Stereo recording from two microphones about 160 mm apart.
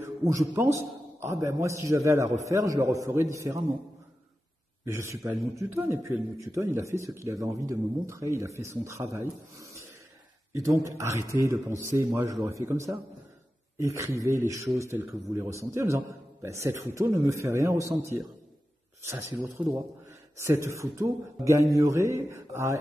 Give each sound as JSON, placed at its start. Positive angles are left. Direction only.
{"t": 0.0, "sound": "a man's voice", "side_deg": -20}
{"t": 4.8, "sound": "a man's voice", "side_deg": -15}
{"t": 19.4, "sound": "a man's voice", "side_deg": -15}